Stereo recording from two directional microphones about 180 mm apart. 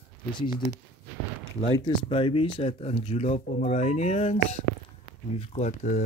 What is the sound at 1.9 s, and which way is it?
Speech, 30° left (ahead or behind).